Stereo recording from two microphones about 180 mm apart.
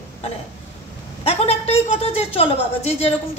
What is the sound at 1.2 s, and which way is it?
A woman's voice, 35° left (ahead or behind).